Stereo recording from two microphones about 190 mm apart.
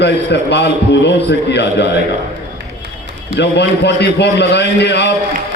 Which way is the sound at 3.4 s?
65° left (ahead or behind).